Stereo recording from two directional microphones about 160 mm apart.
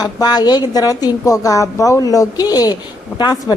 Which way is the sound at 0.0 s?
25° left (ahead or behind).